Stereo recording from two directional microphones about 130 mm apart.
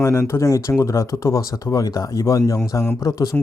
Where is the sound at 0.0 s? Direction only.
20° left (ahead or behind).